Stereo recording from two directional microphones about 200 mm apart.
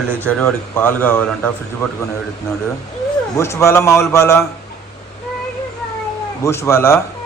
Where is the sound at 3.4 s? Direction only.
15° left (ahead or behind).